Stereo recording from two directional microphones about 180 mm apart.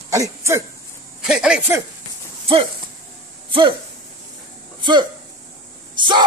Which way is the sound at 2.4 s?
30° right (ahead or behind).